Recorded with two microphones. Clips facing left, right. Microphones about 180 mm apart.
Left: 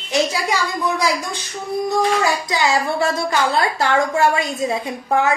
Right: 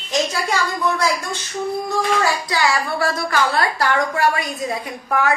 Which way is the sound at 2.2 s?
20° left (ahead or behind).